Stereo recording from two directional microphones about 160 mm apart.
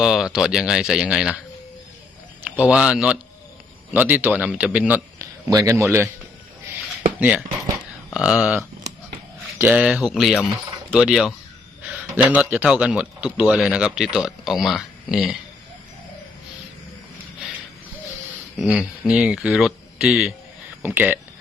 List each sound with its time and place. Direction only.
0.0 s a man's voice: 5° right (ahead or behind)
2.6 s a man's voice: 5° right (ahead or behind)
5.2 s a sound: 20° right (ahead or behind)
7.2 s a man's voice: 10° right (ahead or behind)
18.6 s a man's voice: 5° right (ahead or behind)